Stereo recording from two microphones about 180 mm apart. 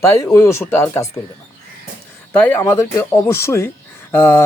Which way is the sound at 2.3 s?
10° left (ahead or behind).